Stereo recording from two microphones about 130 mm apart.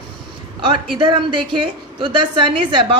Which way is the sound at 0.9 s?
40° right (ahead or behind).